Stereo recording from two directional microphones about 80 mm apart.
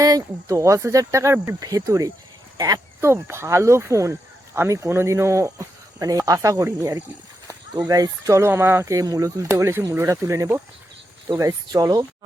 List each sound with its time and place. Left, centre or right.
0.0 s speech: right
3.0 s speech: right
8.4 s speech: right
8.9 s speech: right